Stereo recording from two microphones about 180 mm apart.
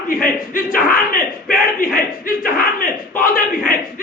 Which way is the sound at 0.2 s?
50° left (ahead or behind).